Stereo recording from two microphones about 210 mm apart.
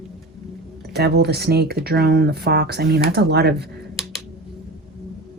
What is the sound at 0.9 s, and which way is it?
Speech, 50° right (ahead or behind).